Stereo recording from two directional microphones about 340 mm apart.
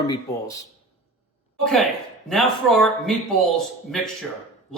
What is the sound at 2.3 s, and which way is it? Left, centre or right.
Speech, centre.